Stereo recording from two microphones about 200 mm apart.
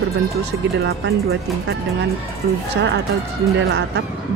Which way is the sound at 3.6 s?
60° right (ahead or behind).